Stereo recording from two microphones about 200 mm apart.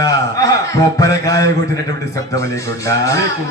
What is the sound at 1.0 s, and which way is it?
Mantra, 15° left (ahead or behind).